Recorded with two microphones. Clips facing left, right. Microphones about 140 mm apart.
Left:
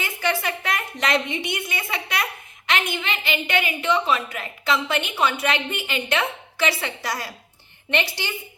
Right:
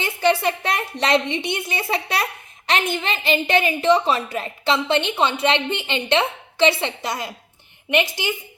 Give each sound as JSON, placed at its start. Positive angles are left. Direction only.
{"t": 0.0, "sound": "a woman's voice", "side_deg": -30}